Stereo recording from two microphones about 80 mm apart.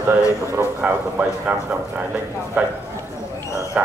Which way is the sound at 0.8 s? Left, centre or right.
Centre.